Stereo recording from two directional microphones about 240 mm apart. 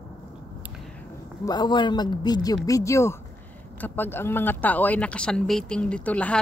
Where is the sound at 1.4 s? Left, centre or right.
Centre.